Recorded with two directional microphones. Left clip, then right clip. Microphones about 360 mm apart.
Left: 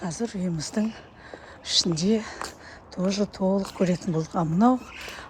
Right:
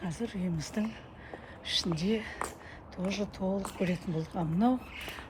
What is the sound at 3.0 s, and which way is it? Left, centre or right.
Speech, left.